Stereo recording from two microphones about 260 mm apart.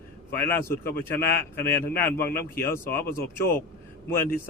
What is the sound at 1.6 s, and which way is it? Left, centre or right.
Speech, centre.